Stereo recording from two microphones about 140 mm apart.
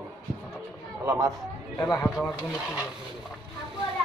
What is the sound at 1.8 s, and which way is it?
Speech, 25° left (ahead or behind).